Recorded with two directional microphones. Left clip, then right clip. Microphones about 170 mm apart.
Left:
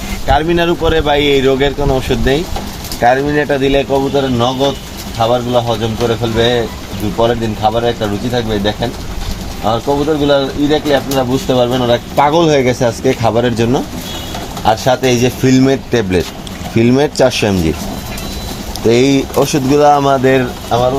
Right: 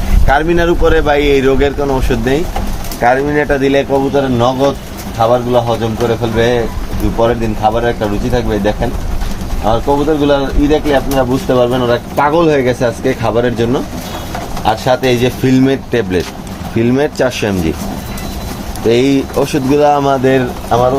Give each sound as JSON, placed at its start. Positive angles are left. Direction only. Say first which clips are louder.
{"t": 0.3, "sound": "speech", "louder": "right 1 dB", "side_deg": 30}
{"t": 11.1, "sound": "speech", "louder": "right 1 dB", "side_deg": 35}
{"t": 18.9, "sound": "speech", "louder": "even", "side_deg": 35}